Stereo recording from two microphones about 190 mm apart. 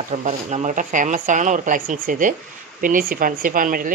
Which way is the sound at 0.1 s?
40° right (ahead or behind).